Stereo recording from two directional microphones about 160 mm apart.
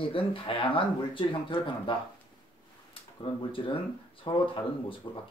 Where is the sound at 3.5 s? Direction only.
35° left (ahead or behind).